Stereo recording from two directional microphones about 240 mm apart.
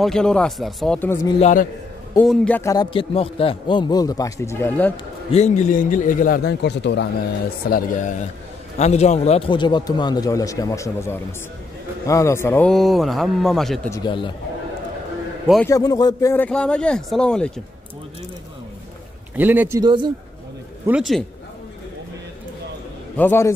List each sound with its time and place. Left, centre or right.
0.0 s speech: centre
1.4 s a man's voice: left
2.1 s a man's voice: centre
5.3 s a man's voice: left
7.7 s a man's voice: left; by 13.7 s centre
13.8 s speech: centre
15.4 s a man's voice: centre
15.7 s speech: centre
19.3 s a man's voice: centre
19.8 s speech: centre
20.8 s speech: centre
23.1 s a man's voice: centre